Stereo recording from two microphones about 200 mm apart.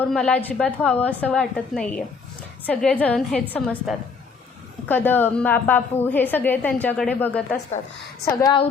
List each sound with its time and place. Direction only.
0.0 s a woman's voice: 5° left (ahead or behind)
8.2 s a woman's voice: 20° left (ahead or behind)